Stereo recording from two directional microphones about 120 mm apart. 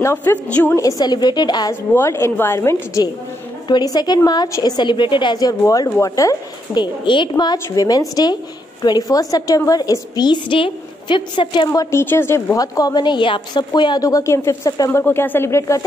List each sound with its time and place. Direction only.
0.0 s a woman's voice: 20° left (ahead or behind)
0.7 s a woman's voice: 30° left (ahead or behind)
2.0 s a woman's voice: 20° left (ahead or behind)
3.6 s a woman's voice: 35° left (ahead or behind)
12.0 s a woman's voice: 20° left (ahead or behind)